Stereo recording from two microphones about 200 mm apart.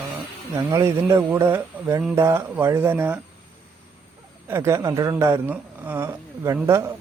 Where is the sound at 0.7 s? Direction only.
15° right (ahead or behind).